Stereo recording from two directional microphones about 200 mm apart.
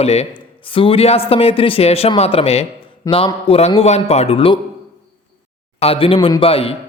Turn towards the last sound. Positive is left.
turn(degrees=30)  # may be behind; listen again after turning